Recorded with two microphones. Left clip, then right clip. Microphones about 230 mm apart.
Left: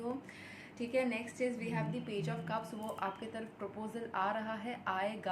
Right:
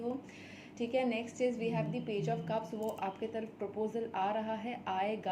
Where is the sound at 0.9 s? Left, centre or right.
Centre.